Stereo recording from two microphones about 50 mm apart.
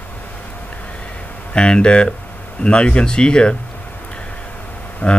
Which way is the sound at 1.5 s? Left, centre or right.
Centre.